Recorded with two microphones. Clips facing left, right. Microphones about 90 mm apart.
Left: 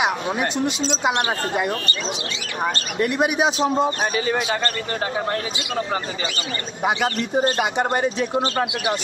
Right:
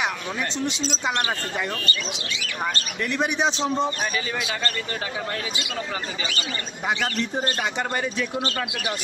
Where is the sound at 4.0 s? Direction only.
40° left (ahead or behind).